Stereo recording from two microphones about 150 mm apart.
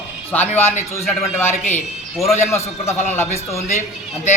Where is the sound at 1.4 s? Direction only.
50° left (ahead or behind).